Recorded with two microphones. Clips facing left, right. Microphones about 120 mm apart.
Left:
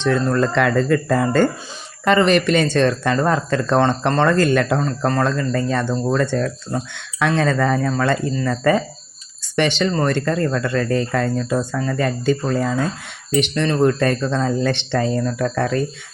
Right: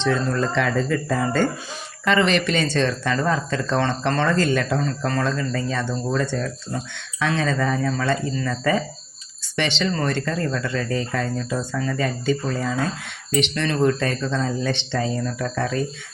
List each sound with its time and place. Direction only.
0.0 s speech: 55° left (ahead or behind)
2.0 s speech: 45° left (ahead or behind)
4.8 s speech: 40° left (ahead or behind)